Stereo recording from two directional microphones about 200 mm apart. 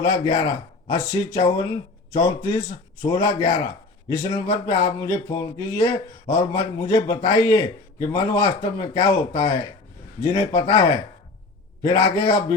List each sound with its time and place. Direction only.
0.0 s speech: 20° left (ahead or behind)